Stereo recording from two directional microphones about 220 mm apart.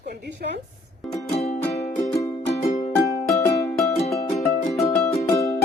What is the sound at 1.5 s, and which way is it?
Music, 30° left (ahead or behind).